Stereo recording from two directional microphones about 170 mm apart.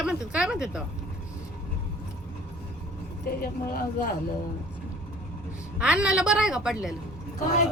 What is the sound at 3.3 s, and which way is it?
Speech, 60° left (ahead or behind).